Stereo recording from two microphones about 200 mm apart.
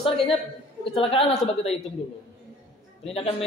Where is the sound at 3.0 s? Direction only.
30° left (ahead or behind).